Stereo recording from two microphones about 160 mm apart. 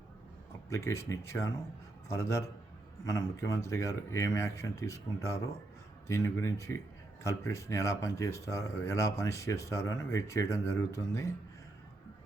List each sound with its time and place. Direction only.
0.7 s speech: 20° left (ahead or behind)